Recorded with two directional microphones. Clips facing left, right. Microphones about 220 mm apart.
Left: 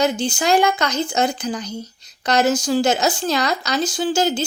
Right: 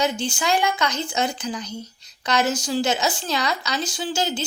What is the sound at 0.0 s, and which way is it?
Speech, 40° left (ahead or behind).